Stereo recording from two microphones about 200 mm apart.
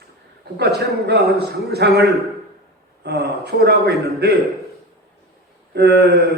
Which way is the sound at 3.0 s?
55° right (ahead or behind).